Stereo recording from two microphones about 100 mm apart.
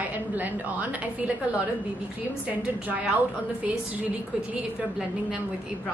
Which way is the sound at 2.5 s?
15° right (ahead or behind).